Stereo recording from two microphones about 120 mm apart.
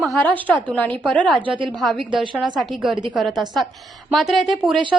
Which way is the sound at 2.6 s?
5° right (ahead or behind).